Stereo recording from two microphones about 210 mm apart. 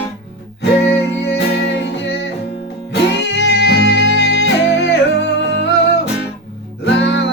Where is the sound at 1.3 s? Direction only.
55° left (ahead or behind).